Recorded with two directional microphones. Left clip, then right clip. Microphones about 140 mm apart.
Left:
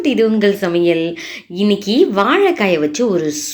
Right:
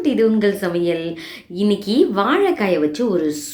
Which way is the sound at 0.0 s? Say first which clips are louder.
Left 3 dB; 25° left (ahead or behind).